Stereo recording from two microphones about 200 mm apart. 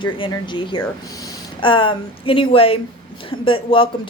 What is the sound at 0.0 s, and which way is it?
A woman's voice, 25° left (ahead or behind).